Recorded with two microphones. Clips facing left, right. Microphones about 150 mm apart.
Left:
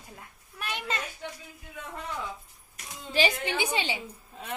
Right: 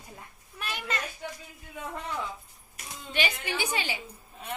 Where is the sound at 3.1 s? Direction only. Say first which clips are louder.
Left 4 dB; 25° left (ahead or behind).